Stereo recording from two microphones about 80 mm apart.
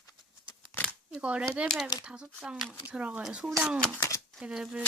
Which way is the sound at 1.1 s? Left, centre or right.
Centre.